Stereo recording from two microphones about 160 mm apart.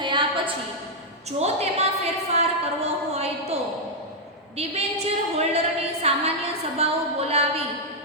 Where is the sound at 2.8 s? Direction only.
40° right (ahead or behind).